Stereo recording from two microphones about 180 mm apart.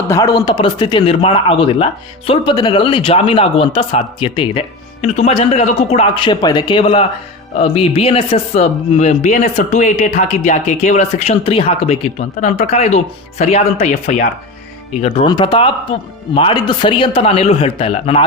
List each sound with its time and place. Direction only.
0.1 s speech: 20° left (ahead or behind); by 14.3 s 40° left (ahead or behind)
15.0 s speech: 30° left (ahead or behind)